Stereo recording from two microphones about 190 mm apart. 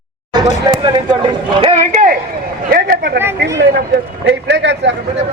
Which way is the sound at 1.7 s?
40° right (ahead or behind).